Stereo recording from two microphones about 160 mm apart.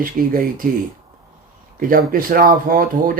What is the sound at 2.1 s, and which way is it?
Speech, 60° right (ahead or behind).